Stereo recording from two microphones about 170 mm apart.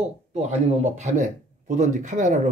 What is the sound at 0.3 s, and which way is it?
Speech, 40° right (ahead or behind).